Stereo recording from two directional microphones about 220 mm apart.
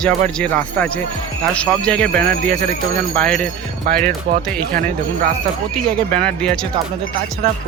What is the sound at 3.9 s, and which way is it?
Speech, 40° right (ahead or behind).